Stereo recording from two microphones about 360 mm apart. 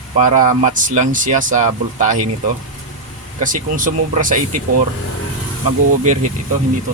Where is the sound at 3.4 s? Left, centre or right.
Right.